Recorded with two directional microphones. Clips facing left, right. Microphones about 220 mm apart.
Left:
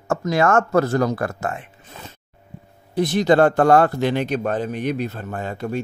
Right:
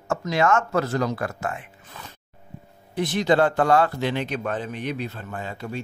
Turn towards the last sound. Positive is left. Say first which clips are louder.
# left 6 dB
turn(degrees=50)  # may be behind; listen again after turning